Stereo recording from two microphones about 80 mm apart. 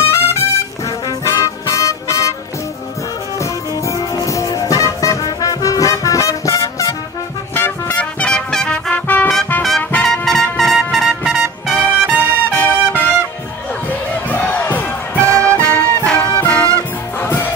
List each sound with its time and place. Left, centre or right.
0.0 s music: left
3.3 s music: left
7.5 s music: left
8.9 s music: left
9.6 s music: centre
12.5 s trumpet: left
13.8 s music: left
15.2 s music: right
15.6 s music: centre
17.2 s music: left